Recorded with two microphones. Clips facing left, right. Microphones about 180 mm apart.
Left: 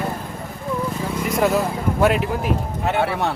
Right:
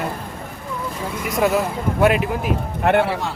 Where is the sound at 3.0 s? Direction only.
60° left (ahead or behind).